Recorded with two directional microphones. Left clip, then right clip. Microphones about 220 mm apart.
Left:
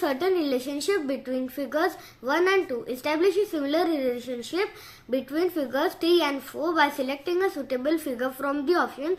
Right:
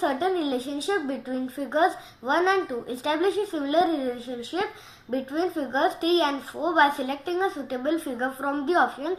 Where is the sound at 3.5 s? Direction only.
25° left (ahead or behind).